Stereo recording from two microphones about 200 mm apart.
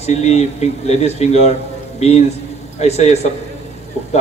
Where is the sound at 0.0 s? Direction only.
30° left (ahead or behind).